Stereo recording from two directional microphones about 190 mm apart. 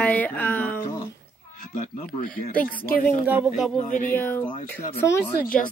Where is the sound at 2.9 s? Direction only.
50° left (ahead or behind).